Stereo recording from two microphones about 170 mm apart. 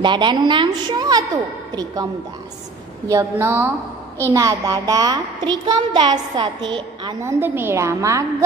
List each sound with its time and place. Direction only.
0.0 s a child's voice: 25° right (ahead or behind)
3.1 s a woman's voice: 15° right (ahead or behind)
7.2 s a woman's voice: 15° right (ahead or behind)